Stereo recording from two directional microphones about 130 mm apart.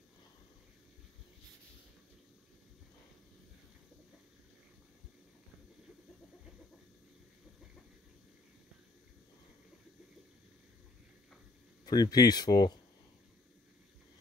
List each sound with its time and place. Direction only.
11.8 s speech: 30° left (ahead or behind)